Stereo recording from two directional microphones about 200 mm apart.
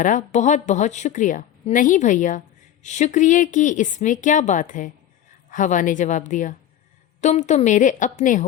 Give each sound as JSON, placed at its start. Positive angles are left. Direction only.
{"t": 0.0, "sound": "a woman's voice", "side_deg": 40}